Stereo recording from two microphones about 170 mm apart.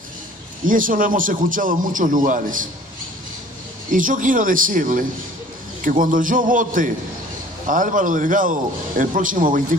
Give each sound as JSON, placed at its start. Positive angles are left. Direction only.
{"t": 0.7, "sound": "a man's voice", "side_deg": -50}
{"t": 3.9, "sound": "a man's voice", "side_deg": -50}